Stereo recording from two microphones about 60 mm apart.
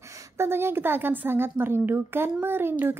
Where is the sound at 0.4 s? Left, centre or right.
Right.